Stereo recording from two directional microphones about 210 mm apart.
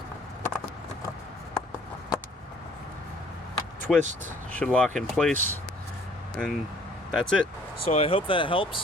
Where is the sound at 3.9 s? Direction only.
Centre (ahead or behind).